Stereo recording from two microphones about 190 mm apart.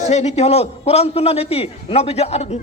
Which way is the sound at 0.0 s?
35° left (ahead or behind).